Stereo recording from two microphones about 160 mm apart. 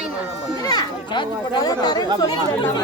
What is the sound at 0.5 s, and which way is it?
Chatter, 25° left (ahead or behind).